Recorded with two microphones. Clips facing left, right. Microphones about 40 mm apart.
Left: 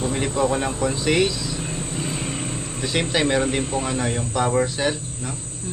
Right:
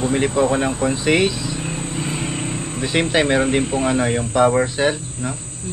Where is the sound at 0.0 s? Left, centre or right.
Centre.